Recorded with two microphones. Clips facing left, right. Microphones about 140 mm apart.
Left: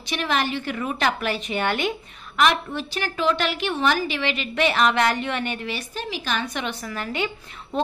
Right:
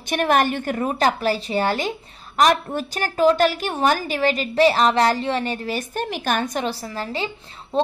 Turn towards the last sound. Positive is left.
turn(degrees=-35)  # may be behind; listen again after turning